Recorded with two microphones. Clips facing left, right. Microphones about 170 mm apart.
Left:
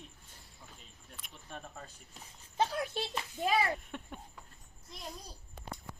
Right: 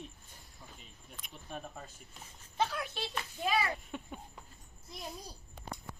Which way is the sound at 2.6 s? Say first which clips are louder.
Left 2 dB; 30° left (ahead or behind).